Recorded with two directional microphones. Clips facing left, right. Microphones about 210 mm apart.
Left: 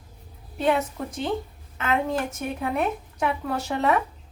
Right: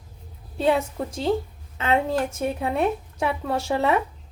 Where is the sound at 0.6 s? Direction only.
30° right (ahead or behind).